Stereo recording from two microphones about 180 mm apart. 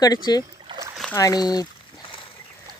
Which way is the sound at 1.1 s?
20° left (ahead or behind).